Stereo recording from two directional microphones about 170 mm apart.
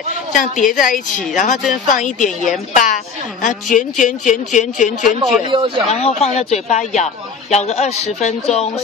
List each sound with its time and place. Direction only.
0.3 s a woman's voice: 50° left (ahead or behind)
5.5 s speech: 30° right (ahead or behind)
5.9 s a man's voice: 40° left (ahead or behind)